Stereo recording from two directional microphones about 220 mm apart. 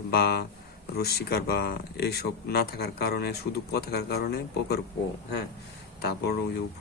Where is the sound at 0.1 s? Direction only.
45° left (ahead or behind).